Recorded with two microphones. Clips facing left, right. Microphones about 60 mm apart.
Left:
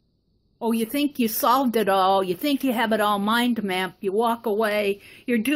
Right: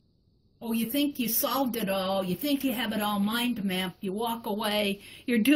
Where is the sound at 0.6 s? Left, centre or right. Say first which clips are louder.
Left 5 dB; left.